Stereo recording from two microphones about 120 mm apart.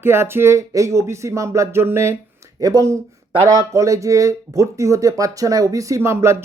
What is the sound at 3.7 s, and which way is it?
Speech, 25° right (ahead or behind).